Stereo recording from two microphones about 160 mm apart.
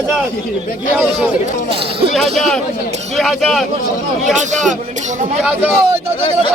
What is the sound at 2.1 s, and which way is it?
Speech, centre (ahead or behind).